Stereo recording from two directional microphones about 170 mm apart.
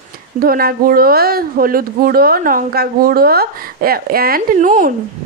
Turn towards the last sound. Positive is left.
turn(degrees=-50)  # may be behind; listen again after turning